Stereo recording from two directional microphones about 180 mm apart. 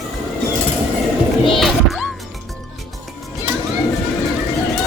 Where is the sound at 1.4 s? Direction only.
Centre (ahead or behind).